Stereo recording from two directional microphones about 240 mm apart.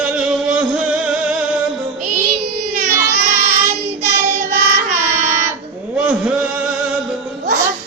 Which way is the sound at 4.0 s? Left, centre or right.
Centre.